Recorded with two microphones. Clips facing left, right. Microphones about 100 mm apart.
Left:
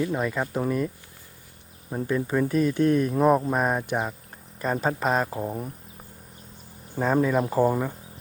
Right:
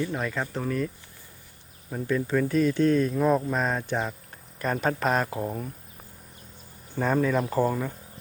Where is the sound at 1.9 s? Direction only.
20° left (ahead or behind); by 5.5 s 5° left (ahead or behind).